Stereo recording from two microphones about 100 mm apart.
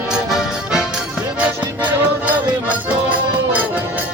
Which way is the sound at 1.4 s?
15° right (ahead or behind).